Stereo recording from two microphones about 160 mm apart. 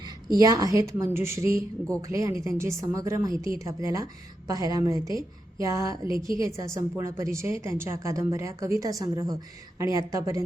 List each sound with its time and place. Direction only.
0.3 s a woman's voice: 20° right (ahead or behind)